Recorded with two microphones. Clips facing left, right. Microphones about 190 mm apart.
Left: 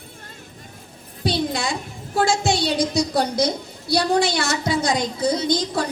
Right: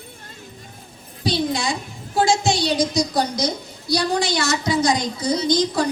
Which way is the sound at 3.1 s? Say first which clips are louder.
Left 1 dB; 55° left (ahead or behind).